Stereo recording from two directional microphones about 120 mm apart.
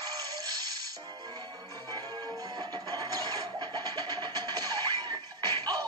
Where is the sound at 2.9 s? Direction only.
40° right (ahead or behind).